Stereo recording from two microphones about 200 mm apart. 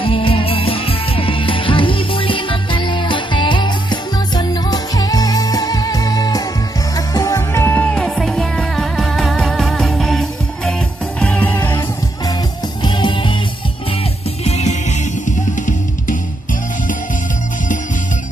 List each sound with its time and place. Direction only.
0.0 s music: 25° left (ahead or behind)
14.4 s music: 35° left (ahead or behind)
15.5 s drum kit: 40° left (ahead or behind)